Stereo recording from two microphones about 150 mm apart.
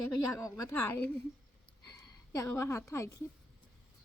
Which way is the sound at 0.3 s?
20° left (ahead or behind).